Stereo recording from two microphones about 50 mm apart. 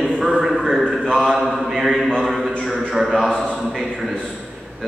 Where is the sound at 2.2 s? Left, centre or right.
Centre.